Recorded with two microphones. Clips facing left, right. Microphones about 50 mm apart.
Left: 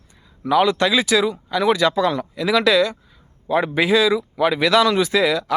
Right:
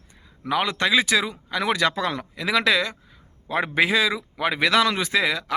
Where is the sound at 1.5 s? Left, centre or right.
Right.